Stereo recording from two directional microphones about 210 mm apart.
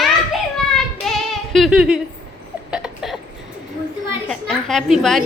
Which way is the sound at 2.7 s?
Centre (ahead or behind).